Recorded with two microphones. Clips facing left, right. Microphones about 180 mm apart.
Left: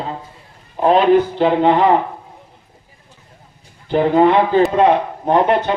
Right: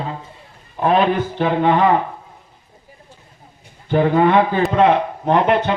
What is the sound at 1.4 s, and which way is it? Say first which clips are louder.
Speech: left 2 dB; 25° left (ahead or behind).